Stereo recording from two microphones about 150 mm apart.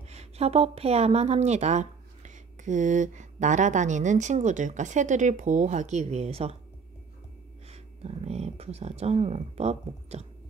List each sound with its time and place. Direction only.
0.1 s a woman's voice: 45° right (ahead or behind)
7.7 s a woman's voice: 45° right (ahead or behind)